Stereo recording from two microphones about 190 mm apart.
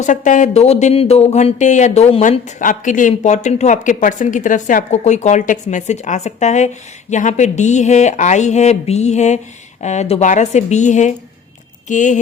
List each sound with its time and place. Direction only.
0.0 s speech: 40° left (ahead or behind)